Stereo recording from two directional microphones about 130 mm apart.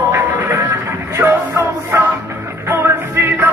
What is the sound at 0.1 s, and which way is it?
Music, 20° right (ahead or behind).